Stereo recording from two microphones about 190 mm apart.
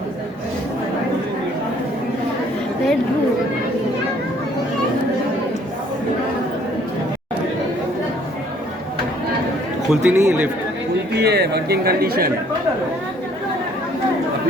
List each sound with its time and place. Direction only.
9.9 s speech: 5° right (ahead or behind)
11.1 s speech: 60° right (ahead or behind)